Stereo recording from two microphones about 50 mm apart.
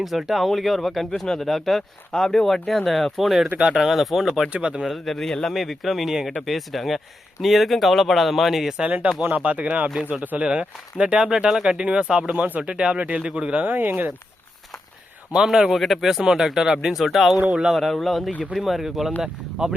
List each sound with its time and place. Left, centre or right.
0.0 s speech: centre
4.4 s speech: right
4.8 s speech: centre
8.8 s speech: right
15.4 s speech: centre